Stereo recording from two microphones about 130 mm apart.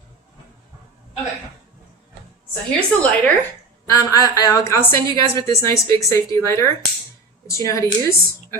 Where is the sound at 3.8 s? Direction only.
25° left (ahead or behind).